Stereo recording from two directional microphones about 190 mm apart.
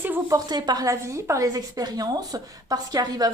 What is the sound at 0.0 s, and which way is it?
Speech, 15° right (ahead or behind).